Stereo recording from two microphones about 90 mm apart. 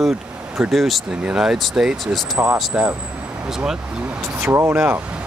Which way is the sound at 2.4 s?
20° right (ahead or behind).